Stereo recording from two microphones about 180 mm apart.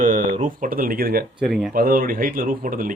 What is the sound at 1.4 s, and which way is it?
Speech, centre (ahead or behind).